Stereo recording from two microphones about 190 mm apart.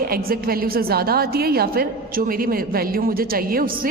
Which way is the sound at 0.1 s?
50° right (ahead or behind).